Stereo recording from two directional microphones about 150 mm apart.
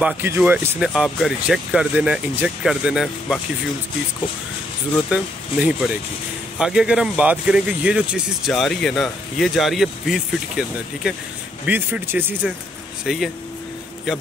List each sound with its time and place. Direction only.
0.0 s speech: 10° right (ahead or behind)
0.7 s speech: 5° right (ahead or behind)
5.1 s speech: 5° right (ahead or behind)
11.6 s speech: 10° right (ahead or behind)
13.0 s speech: centre (ahead or behind)